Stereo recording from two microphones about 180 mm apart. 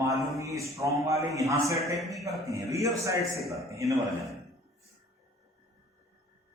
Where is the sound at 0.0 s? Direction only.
15° right (ahead or behind).